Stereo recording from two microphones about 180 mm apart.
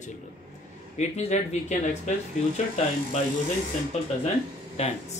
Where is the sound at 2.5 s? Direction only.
40° left (ahead or behind).